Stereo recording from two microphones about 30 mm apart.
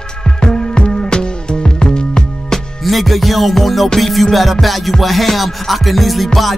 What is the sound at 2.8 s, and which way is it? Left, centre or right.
Music, centre.